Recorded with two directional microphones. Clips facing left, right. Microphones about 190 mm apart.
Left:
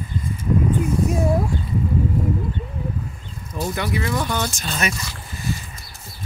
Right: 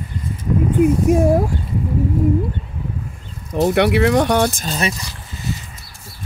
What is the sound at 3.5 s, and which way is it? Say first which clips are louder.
Speech: right 10 dB; 70° right (ahead or behind).